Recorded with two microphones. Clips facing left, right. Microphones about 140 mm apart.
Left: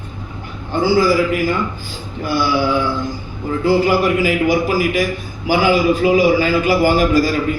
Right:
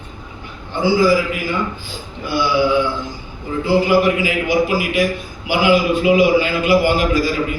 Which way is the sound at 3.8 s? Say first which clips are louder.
Even; 45° left (ahead or behind).